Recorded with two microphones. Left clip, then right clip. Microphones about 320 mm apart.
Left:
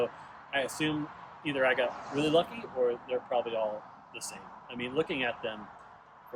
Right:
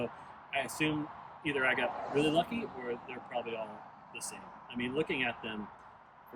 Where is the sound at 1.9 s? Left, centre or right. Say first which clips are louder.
Right 1 dB; right.